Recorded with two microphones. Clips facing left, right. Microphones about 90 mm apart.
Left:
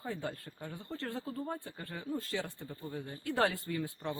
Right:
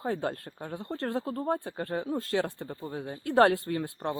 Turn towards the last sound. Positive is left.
turn(degrees=-50)  # may be behind; listen again after turning